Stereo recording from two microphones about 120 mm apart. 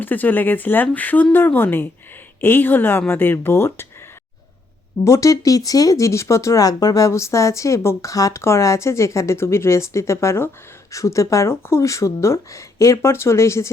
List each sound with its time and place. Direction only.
0.0 s speech: 15° left (ahead or behind)
5.0 s speech: 25° left (ahead or behind)